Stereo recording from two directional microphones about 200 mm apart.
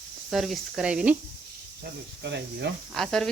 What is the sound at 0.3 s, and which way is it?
Speech, centre (ahead or behind).